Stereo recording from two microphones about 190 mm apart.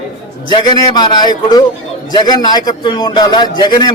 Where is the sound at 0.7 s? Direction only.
20° left (ahead or behind).